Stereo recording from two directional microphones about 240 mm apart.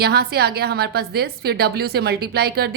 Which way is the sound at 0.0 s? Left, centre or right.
Right.